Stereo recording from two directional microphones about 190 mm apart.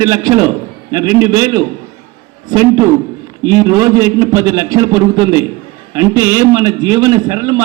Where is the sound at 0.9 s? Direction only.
20° right (ahead or behind).